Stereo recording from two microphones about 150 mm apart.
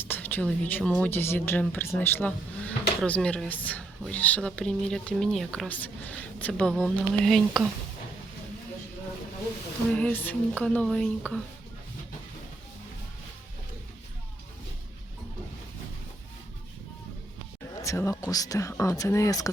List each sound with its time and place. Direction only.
0.0 s speech: 10° left (ahead or behind)
9.9 s speech: 10° left (ahead or behind)
17.8 s speech: 20° left (ahead or behind)